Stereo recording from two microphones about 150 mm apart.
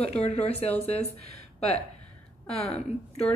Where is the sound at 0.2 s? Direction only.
45° left (ahead or behind).